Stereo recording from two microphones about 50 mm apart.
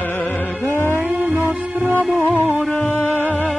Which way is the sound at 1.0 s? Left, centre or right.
Right.